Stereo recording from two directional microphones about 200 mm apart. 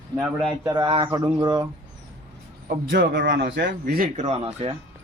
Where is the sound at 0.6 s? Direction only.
20° right (ahead or behind).